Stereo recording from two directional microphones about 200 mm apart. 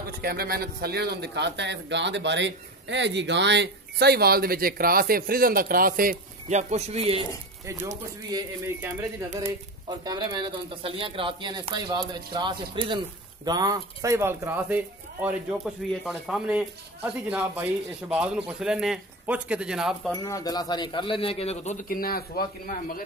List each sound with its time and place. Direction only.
0.2 s a man's voice: 50° right (ahead or behind); by 7.2 s 30° right (ahead or behind)
8.3 s speech: 20° right (ahead or behind)
10.0 s speech: 20° right (ahead or behind); by 20.1 s 5° right (ahead or behind)
20.1 s speech: 15° left (ahead or behind); by 23.0 s 45° left (ahead or behind)